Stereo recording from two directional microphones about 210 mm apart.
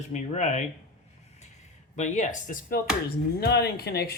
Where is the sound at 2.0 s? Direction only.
40° left (ahead or behind).